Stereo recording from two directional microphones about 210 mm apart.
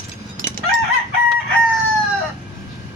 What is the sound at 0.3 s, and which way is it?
Chicken, 35° right (ahead or behind).